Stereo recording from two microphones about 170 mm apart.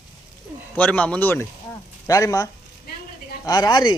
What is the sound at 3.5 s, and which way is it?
Speech, 20° left (ahead or behind).